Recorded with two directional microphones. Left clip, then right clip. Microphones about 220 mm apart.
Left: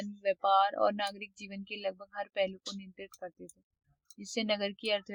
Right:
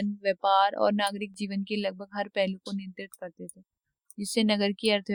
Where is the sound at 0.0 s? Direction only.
45° right (ahead or behind).